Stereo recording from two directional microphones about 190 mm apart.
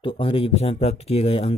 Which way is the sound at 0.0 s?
30° left (ahead or behind).